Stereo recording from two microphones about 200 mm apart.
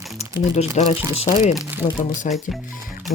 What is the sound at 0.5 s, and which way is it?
Speech, 30° left (ahead or behind).